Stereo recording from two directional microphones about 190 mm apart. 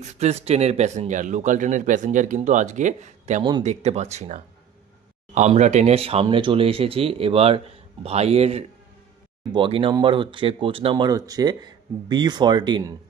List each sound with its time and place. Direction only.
0.0 s speech: 35° right (ahead or behind)